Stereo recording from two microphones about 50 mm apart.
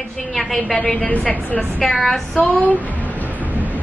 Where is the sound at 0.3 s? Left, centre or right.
Centre.